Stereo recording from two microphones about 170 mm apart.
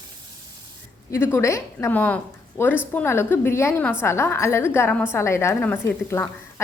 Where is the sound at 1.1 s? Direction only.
15° left (ahead or behind).